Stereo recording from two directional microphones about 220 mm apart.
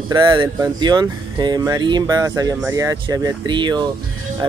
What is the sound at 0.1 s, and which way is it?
Speech, 20° right (ahead or behind).